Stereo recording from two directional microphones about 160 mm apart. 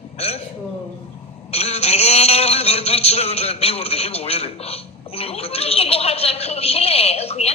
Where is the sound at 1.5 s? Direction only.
40° left (ahead or behind).